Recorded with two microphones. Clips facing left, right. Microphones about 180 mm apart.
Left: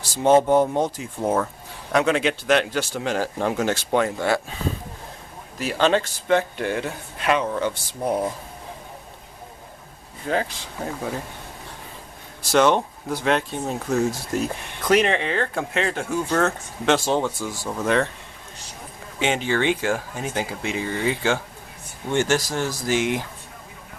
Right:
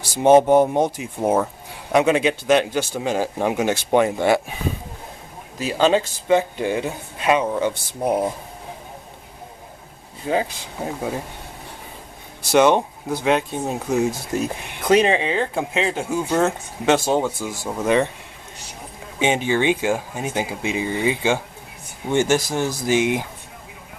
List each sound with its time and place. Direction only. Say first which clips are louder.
0.1 s speech: right 3 dB; 15° right (ahead or behind)
5.7 s speech: right 2 dB; 10° right (ahead or behind)
10.2 s speech: right 2 dB; 15° right (ahead or behind)
12.5 s speech: right 3 dB; 15° right (ahead or behind)
19.2 s speech: right 3 dB; 15° right (ahead or behind)